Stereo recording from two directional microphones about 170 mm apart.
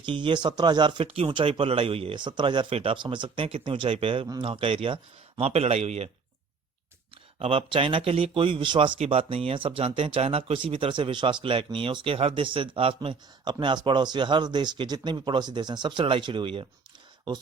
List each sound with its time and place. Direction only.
0.0 s a man's voice: 30° right (ahead or behind)
7.3 s a man's voice: 35° right (ahead or behind)